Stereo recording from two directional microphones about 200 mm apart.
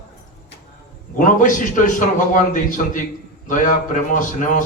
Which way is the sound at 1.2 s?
40° left (ahead or behind).